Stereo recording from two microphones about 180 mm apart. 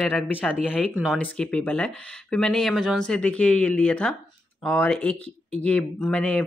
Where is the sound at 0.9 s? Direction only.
5° right (ahead or behind).